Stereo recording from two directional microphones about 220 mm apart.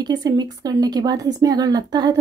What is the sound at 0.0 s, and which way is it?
A woman's voice, 20° right (ahead or behind).